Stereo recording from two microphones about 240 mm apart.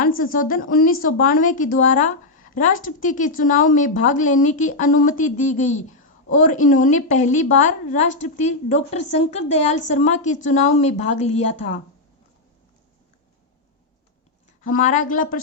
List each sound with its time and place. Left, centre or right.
0.0 s a woman's voice: left
14.7 s a woman's voice: left